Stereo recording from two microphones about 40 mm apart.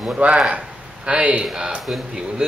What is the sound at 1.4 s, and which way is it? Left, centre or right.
Speech, centre.